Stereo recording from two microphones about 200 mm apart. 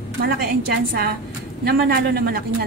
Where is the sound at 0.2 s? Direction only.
50° right (ahead or behind).